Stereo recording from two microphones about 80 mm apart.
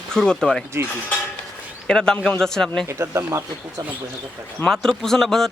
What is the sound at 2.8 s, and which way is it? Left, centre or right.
Speech, right.